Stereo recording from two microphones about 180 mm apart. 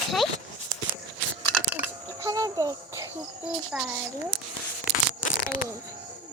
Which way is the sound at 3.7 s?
5° right (ahead or behind).